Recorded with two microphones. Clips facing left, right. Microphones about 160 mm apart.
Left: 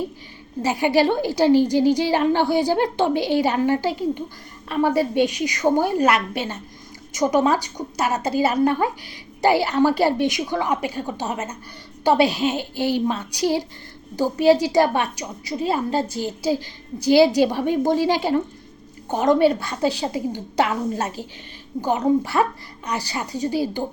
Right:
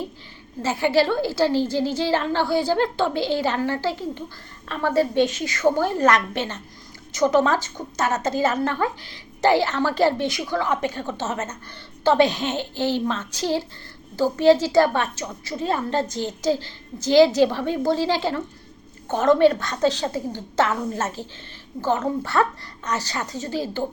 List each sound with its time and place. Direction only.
0.6 s a woman's voice: 15° left (ahead or behind)